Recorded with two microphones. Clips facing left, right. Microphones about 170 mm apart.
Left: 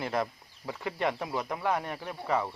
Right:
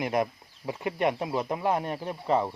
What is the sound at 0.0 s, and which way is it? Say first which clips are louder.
Speech: right 4 dB; 15° right (ahead or behind).